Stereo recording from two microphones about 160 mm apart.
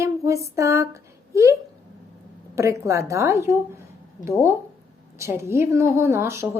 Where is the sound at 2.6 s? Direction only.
20° right (ahead or behind).